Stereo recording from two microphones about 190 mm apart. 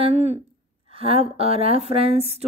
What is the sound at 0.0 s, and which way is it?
A woman's voice, 35° right (ahead or behind).